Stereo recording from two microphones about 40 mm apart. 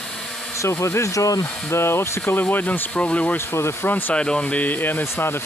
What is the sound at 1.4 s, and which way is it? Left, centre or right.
Speech, left.